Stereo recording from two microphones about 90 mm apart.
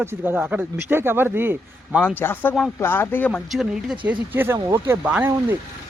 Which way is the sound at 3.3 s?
5° right (ahead or behind).